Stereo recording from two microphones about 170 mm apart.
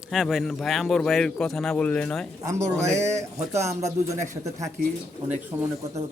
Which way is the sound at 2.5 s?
15° right (ahead or behind).